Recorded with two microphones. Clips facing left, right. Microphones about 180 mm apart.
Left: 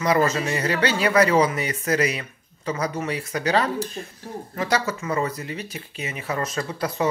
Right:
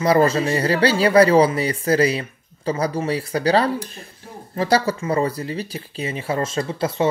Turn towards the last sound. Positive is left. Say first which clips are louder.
# right 4 dB
turn(degrees=-25)  # may be behind; listen again after turning